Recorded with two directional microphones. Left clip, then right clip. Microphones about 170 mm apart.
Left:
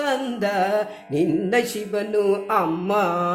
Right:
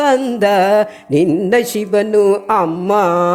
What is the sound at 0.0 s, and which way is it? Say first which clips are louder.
Mantra: right 10 dB; 40° right (ahead or behind).